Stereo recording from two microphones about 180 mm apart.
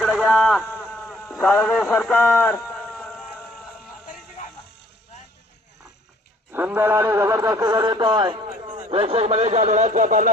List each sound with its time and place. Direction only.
0.4 s speech: 5° left (ahead or behind)
0.7 s a sound: 5° left (ahead or behind)
6.5 s speech: 10° right (ahead or behind); by 10.2 s 45° right (ahead or behind)